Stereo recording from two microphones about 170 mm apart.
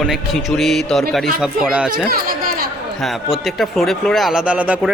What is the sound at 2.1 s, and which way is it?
Chatter, 60° right (ahead or behind).